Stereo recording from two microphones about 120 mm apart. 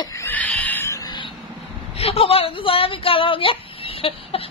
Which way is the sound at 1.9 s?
55° left (ahead or behind).